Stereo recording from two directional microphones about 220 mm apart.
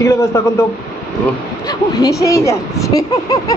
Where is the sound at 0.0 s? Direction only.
15° left (ahead or behind).